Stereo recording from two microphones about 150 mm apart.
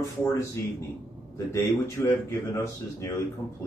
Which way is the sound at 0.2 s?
20° left (ahead or behind).